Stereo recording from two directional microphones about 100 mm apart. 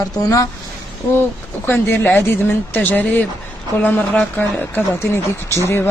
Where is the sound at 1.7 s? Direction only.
25° left (ahead or behind).